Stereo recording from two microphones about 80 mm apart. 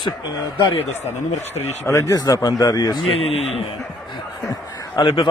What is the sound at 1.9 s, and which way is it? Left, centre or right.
Speech, left.